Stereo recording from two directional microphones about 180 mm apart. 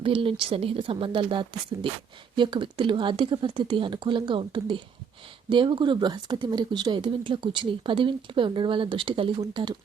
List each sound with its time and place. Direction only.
0.0 s speech: 30° right (ahead or behind)